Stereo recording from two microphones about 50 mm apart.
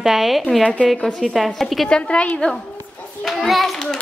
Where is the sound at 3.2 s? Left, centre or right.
Centre.